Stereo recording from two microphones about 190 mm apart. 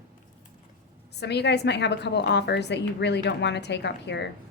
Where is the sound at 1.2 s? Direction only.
60° left (ahead or behind).